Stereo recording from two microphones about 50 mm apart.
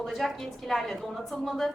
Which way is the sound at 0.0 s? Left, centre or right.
Centre.